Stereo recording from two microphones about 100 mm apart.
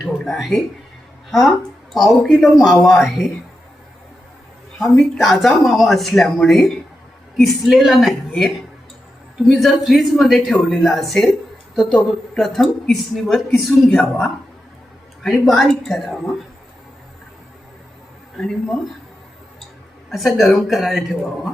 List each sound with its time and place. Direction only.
0.0 s a sound: 5° right (ahead or behind)
1.3 s speech: centre (ahead or behind)
4.8 s speech: centre (ahead or behind)
13.9 s speech: 15° left (ahead or behind)
15.2 s speech: centre (ahead or behind)
20.1 s speech: centre (ahead or behind)